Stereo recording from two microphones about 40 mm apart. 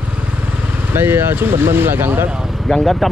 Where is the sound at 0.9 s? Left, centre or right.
Right.